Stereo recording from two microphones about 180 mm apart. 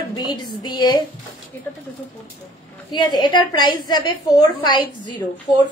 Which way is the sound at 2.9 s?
25° left (ahead or behind).